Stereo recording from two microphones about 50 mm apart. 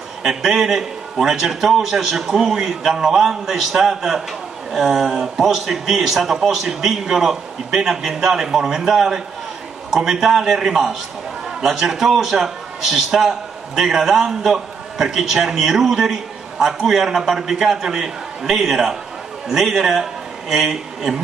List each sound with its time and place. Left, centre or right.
0.2 s a man's voice: centre